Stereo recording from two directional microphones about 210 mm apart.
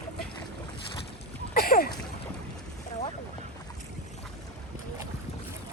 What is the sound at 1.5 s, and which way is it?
Boat, 45° left (ahead or behind).